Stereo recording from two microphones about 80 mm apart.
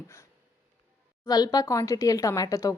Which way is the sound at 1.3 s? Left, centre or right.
Left.